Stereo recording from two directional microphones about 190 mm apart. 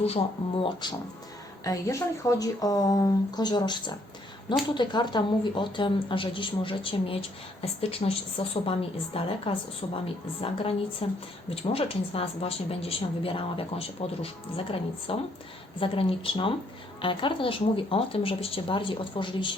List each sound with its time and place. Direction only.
0.6 s speech: 25° left (ahead or behind)